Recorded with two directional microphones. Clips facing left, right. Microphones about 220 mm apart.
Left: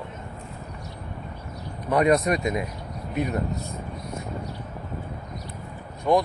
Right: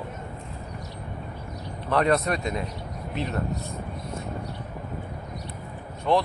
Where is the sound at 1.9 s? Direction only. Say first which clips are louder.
Left 3 dB; 15° left (ahead or behind).